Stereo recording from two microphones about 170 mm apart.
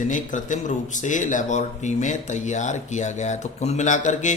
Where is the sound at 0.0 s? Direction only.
50° left (ahead or behind).